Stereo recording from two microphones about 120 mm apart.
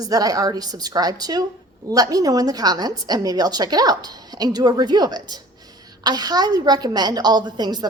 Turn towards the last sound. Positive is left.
turn(degrees=-35)  # may be behind; listen again after turning